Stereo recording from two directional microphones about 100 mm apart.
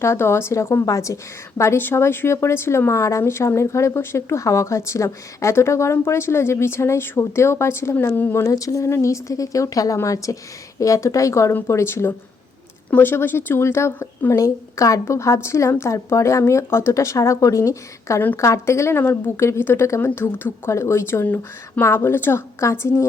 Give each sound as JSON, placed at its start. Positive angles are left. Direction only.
{"t": 0.0, "sound": "a woman's voice", "side_deg": 25}
{"t": 8.4, "sound": "a woman's voice", "side_deg": 35}